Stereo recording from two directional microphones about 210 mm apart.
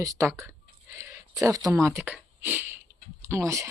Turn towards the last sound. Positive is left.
turn(degrees=-15)  # may be behind; listen again after turning